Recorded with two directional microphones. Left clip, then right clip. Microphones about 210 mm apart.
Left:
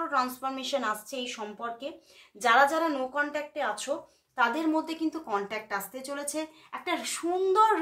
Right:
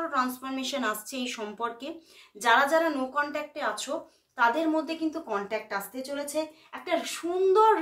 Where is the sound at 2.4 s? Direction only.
25° left (ahead or behind).